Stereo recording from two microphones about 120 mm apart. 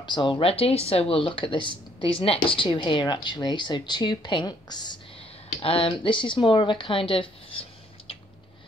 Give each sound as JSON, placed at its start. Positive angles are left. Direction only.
{"t": 0.0, "sound": "speech", "side_deg": 40}
{"t": 5.6, "sound": "speech", "side_deg": 50}